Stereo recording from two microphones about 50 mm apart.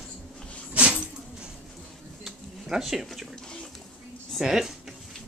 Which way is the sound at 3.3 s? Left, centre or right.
Centre.